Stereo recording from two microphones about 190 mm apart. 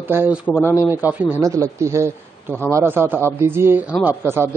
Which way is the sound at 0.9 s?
10° right (ahead or behind).